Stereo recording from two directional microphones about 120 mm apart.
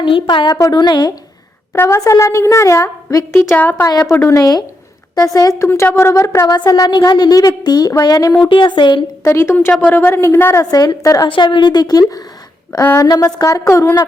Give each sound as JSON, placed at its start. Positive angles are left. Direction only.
{"t": 0.0, "sound": "speech", "side_deg": 45}
{"t": 1.7, "sound": "a woman's voice", "side_deg": 20}
{"t": 3.5, "sound": "a woman's voice", "side_deg": 15}
{"t": 9.2, "sound": "a woman's voice", "side_deg": 20}
{"t": 11.3, "sound": "speech", "side_deg": 40}
{"t": 12.8, "sound": "a woman's voice", "side_deg": 20}